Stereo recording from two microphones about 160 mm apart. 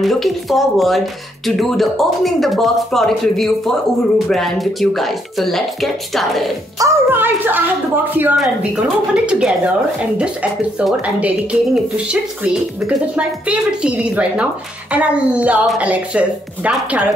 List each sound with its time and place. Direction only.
0.0 s speech: centre (ahead or behind)
6.8 s a woman's voice: 15° right (ahead or behind)
10.8 s a woman's voice: 5° right (ahead or behind)